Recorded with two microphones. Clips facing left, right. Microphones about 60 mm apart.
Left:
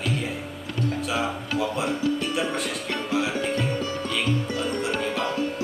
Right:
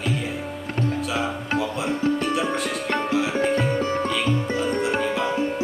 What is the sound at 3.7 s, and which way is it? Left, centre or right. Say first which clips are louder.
Music: right 5 dB; right.